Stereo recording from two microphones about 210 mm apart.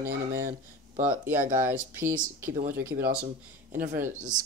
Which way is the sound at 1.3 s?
40° right (ahead or behind).